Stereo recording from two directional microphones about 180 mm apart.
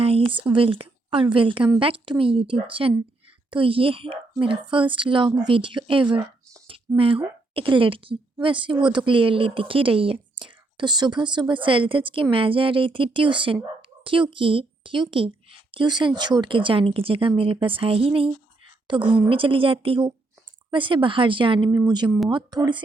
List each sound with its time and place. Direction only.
0.4 s speech: 30° right (ahead or behind)